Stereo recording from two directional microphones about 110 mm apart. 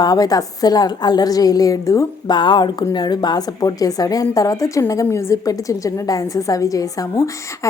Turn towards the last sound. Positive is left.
turn(degrees=30)  # may be behind; listen again after turning